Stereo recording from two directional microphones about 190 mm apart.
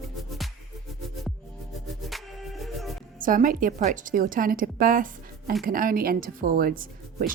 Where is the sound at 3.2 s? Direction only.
45° right (ahead or behind).